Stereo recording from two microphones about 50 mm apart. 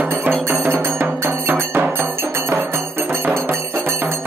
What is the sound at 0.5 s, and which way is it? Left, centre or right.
Music, right.